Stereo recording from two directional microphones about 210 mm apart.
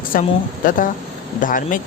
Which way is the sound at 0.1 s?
40° left (ahead or behind).